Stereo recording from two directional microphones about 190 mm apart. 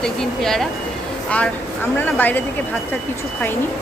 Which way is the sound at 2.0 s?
10° left (ahead or behind).